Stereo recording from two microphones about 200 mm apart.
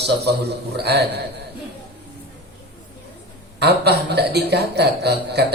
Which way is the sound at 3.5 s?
55° right (ahead or behind).